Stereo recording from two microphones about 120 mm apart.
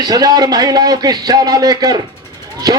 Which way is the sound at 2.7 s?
30° right (ahead or behind).